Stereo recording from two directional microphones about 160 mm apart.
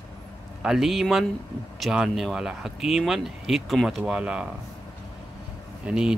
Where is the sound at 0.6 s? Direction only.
Centre (ahead or behind).